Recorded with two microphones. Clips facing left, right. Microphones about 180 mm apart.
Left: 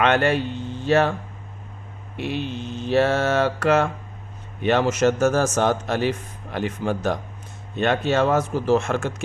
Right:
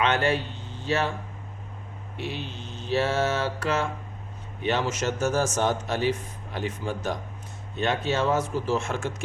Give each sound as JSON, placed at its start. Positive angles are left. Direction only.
{"t": 0.0, "sound": "speech", "side_deg": 55}
{"t": 2.1, "sound": "speech", "side_deg": 55}